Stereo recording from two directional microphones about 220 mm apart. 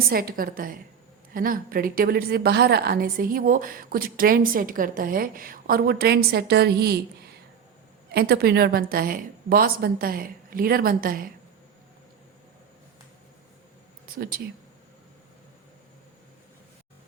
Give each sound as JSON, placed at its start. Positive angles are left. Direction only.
{"t": 0.1, "sound": "a woman's voice", "side_deg": -40}
{"t": 8.1, "sound": "a woman's voice", "side_deg": -45}
{"t": 14.2, "sound": "speech", "side_deg": -40}